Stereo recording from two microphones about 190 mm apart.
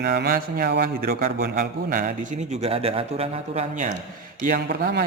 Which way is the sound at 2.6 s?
30° right (ahead or behind).